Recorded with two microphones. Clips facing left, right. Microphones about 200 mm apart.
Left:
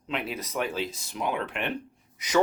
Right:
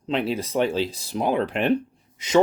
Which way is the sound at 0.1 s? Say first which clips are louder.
Right 8 dB; 30° right (ahead or behind).